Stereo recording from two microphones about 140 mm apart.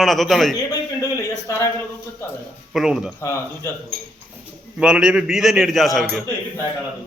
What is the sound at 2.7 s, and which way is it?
Speech, centre (ahead or behind).